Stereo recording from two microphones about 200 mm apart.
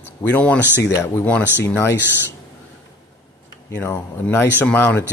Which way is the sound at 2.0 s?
60° left (ahead or behind).